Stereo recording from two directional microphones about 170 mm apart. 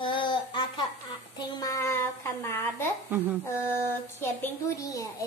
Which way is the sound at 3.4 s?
15° left (ahead or behind).